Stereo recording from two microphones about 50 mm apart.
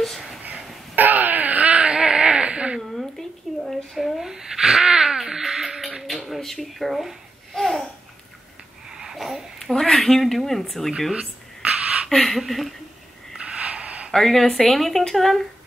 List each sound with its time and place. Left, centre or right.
0.9 s wail: right
3.6 s babbling: centre
5.9 s dishes: centre
7.5 s babbling: centre
8.9 s babbling: centre
9.6 s speech: centre
11.1 s a sound: right
12.1 s speech: centre
13.7 s a sound: right
14.1 s speech: centre